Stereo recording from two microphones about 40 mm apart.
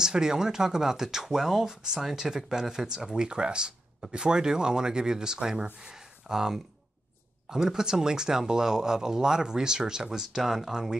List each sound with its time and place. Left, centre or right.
0.0 s speech: centre